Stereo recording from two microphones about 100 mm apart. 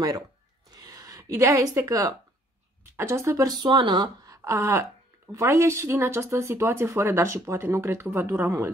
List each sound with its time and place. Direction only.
0.7 s a woman's voice: 35° right (ahead or behind)
3.5 s a woman's voice: 50° right (ahead or behind); by 8.7 s 25° right (ahead or behind)